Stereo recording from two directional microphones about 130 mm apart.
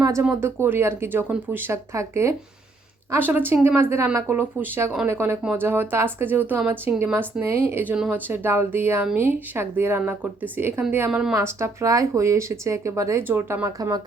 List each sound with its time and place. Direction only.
0.0 s speech: 25° right (ahead or behind)
11.1 s a woman's voice: 5° right (ahead or behind)
11.3 s speech: 25° right (ahead or behind)
13.7 s speech: 25° right (ahead or behind)